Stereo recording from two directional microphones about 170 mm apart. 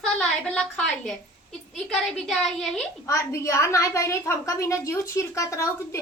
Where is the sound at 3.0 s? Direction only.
20° left (ahead or behind).